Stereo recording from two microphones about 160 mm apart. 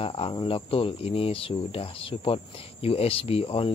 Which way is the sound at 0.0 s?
35° left (ahead or behind).